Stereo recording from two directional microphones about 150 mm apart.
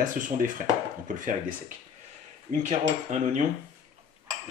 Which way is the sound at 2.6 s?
55° right (ahead or behind).